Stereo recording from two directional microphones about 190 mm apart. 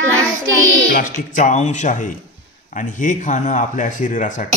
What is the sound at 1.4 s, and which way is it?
Speech, 40° left (ahead or behind).